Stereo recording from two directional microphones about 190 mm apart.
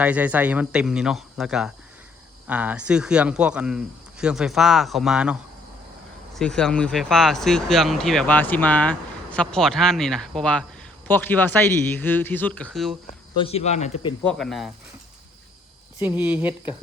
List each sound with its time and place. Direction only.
0.0 s speech: 5° right (ahead or behind)
6.4 s speech: 5° left (ahead or behind)
13.3 s speech: 30° left (ahead or behind)
14.3 s speech: 5° left (ahead or behind)
16.0 s speech: 10° right (ahead or behind)